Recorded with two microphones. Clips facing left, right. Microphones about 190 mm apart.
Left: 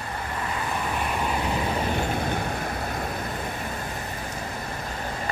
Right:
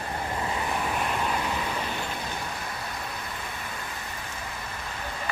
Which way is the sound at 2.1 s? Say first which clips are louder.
Left 7 dB; 50° left (ahead or behind).